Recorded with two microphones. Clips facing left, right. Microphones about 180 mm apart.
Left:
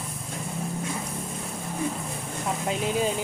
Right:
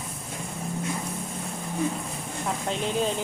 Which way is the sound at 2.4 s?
5° left (ahead or behind).